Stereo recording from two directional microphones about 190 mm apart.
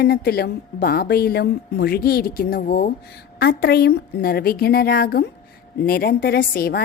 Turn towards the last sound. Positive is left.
turn(degrees=55)  # may be behind; listen again after turning